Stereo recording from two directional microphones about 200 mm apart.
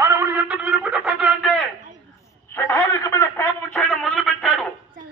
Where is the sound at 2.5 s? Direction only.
10° left (ahead or behind).